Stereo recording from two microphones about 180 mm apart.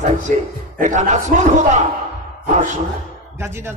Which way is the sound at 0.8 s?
40° right (ahead or behind).